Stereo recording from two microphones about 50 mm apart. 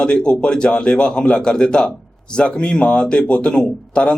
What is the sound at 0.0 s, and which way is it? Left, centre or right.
A man's voice, centre.